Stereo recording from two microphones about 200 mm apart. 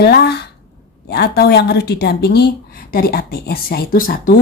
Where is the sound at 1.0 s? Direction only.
55° left (ahead or behind).